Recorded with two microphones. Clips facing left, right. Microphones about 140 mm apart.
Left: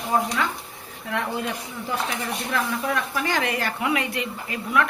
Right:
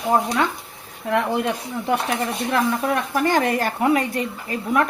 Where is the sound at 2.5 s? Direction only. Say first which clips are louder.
Right 5 dB; 50° right (ahead or behind).